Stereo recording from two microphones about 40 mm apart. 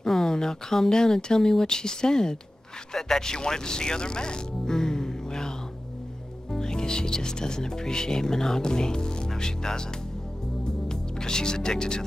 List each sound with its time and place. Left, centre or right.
0.0 s speech: centre
6.5 s speech: centre
10.6 s music: centre